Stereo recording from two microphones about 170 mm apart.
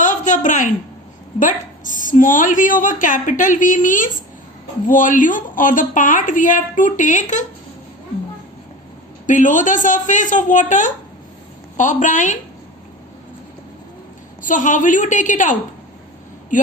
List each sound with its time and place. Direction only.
0.0 s a sound: 50° left (ahead or behind)
1.4 s a woman's voice: 50° left (ahead or behind)
9.2 s a woman's voice: 50° left (ahead or behind)
14.4 s a woman's voice: 50° left (ahead or behind)